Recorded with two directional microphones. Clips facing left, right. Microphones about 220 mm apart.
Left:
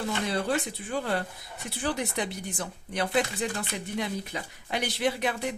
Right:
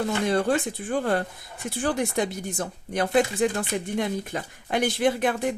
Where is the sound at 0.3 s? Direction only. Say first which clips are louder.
Right 5 dB; 50° right (ahead or behind).